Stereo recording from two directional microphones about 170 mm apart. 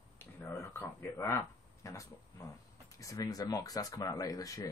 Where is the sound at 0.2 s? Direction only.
15° left (ahead or behind).